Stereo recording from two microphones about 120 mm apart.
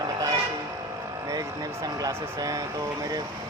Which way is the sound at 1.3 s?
30° right (ahead or behind).